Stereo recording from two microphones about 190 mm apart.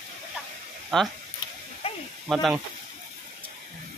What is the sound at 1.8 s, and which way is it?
Snake, 30° left (ahead or behind).